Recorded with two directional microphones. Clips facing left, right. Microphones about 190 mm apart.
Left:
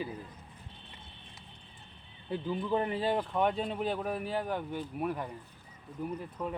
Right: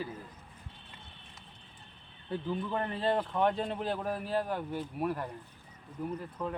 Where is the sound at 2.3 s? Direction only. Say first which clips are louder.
Left 2 dB; 15° left (ahead or behind).